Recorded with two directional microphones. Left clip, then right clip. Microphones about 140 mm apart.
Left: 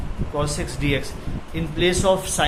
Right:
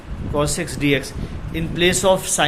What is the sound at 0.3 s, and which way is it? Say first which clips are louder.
Speech: right 4 dB; 50° right (ahead or behind).